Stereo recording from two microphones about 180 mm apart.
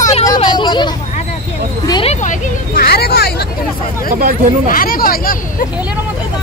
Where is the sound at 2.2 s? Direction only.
50° left (ahead or behind).